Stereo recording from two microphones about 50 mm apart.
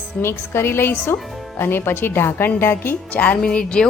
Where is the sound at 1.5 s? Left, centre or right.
Left.